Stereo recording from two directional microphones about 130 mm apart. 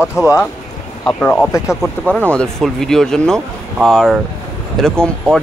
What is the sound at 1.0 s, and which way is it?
Speech, 10° left (ahead or behind).